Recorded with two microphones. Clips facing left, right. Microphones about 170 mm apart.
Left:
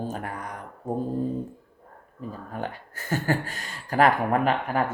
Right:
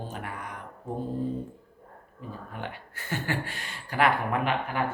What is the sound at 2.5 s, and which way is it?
Speech, 40° left (ahead or behind).